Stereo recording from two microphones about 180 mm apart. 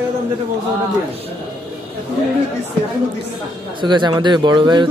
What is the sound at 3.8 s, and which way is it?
Speech, 25° right (ahead or behind).